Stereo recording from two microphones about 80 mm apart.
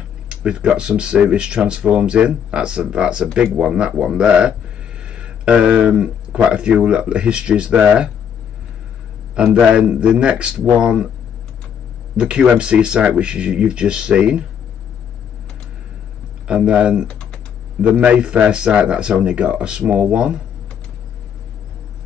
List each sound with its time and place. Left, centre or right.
0.3 s speech: centre
9.3 s speech: centre
12.2 s speech: centre
16.4 s speech: centre